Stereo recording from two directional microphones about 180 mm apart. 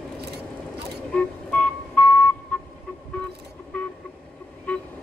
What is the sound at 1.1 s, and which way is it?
Vehicle, 5° left (ahead or behind).